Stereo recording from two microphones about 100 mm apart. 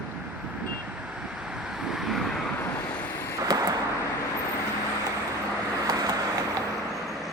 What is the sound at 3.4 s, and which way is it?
Vehicle, 40° right (ahead or behind).